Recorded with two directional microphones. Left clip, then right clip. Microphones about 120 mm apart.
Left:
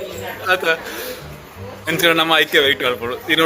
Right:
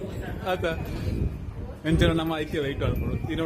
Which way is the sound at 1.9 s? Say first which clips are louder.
Left 12 dB; 15° right (ahead or behind).